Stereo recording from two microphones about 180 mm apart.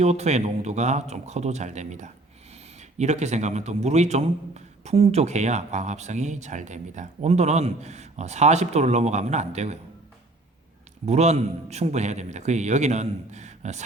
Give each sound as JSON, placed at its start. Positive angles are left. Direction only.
{"t": 0.0, "sound": "a man's voice", "side_deg": -35}
{"t": 11.0, "sound": "a man's voice", "side_deg": -40}